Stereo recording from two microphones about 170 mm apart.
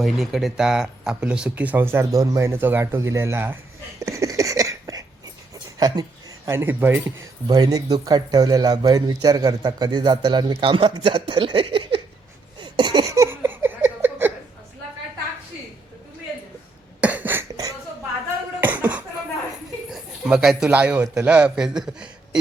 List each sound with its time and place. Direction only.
0.0 s speech: centre (ahead or behind)
4.0 s a sound: 20° right (ahead or behind)
5.8 s speech: 20° right (ahead or behind)
7.4 s a man's voice: 25° right (ahead or behind)
12.5 s a sound: 25° right (ahead or behind)
17.0 s cough: 10° right (ahead or behind)
19.9 s a man's voice: centre (ahead or behind)